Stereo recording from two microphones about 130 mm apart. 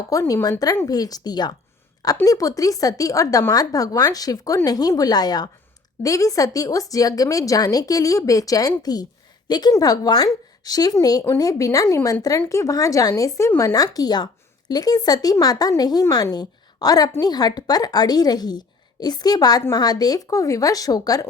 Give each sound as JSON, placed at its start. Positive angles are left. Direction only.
{"t": 0.1, "sound": "a woman's voice", "side_deg": 25}